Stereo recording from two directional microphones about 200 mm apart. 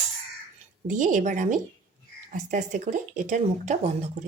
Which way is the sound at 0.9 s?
40° right (ahead or behind).